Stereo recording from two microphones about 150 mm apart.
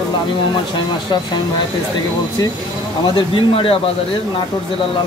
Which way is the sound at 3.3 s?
40° left (ahead or behind).